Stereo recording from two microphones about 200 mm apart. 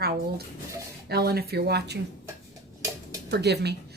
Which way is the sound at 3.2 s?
55° right (ahead or behind).